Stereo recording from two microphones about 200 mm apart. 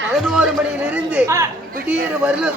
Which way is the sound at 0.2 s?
Centre (ahead or behind).